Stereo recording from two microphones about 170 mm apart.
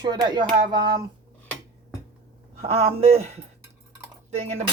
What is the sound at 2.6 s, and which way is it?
Speech, 35° right (ahead or behind).